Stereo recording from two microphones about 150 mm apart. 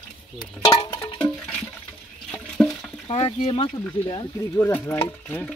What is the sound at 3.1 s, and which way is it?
Speech, 40° left (ahead or behind).